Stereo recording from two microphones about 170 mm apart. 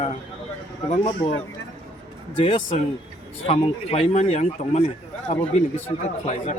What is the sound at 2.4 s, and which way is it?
A man's voice, 35° left (ahead or behind).